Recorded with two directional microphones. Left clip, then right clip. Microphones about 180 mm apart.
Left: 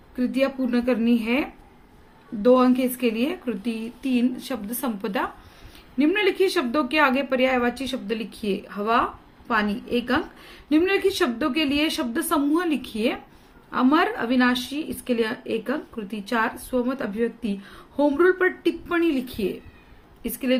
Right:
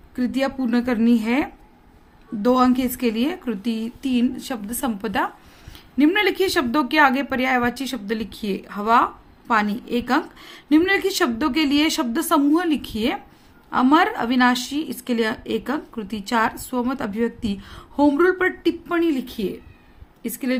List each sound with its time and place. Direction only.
0.2 s a woman's voice: 50° right (ahead or behind)